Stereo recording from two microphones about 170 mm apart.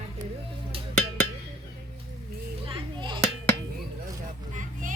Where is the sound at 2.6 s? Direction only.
30° right (ahead or behind).